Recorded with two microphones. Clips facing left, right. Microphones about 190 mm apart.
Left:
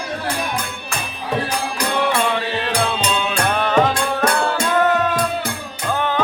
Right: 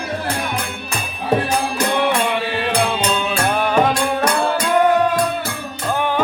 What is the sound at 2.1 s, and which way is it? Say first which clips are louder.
Music: even; 15° right (ahead or behind).